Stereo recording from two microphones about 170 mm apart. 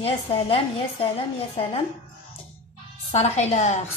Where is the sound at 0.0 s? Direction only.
35° left (ahead or behind).